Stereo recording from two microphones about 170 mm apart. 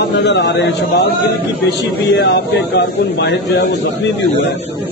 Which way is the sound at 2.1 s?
85° left.